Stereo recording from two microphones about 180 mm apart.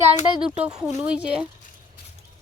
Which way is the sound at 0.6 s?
5° right (ahead or behind).